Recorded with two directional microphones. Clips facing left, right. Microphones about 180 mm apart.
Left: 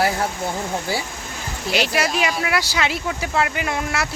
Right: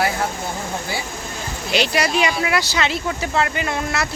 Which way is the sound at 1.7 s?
5° left (ahead or behind).